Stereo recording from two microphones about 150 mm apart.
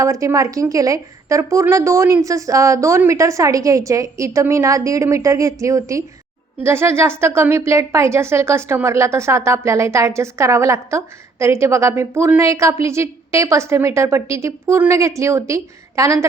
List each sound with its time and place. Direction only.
0.0 s a woman's voice: 20° right (ahead or behind)